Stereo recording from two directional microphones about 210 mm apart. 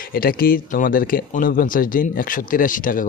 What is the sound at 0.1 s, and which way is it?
Speech, 45° left (ahead or behind).